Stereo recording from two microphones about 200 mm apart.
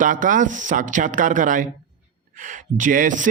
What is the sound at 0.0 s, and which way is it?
Speech, 40° right (ahead or behind).